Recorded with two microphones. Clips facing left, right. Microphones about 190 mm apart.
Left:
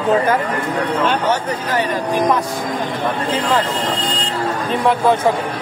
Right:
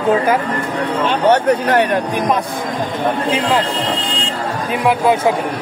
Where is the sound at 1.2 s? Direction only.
65° right (ahead or behind).